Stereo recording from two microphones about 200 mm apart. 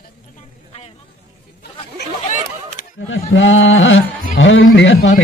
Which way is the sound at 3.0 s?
75° left (ahead or behind).